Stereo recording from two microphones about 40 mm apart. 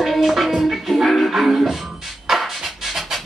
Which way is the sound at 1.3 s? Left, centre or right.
Centre.